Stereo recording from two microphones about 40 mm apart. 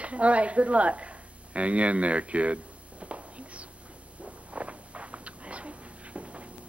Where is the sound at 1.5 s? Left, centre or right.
Right.